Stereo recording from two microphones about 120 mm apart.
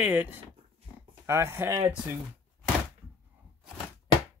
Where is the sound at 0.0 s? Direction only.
15° right (ahead or behind).